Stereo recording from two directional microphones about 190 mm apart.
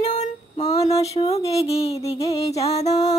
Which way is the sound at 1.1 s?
35° left (ahead or behind).